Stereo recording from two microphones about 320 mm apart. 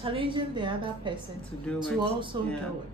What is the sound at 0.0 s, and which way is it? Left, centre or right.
A woman's voice, centre.